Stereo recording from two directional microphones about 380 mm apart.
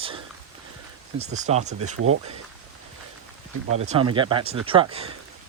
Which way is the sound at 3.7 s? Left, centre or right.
Centre.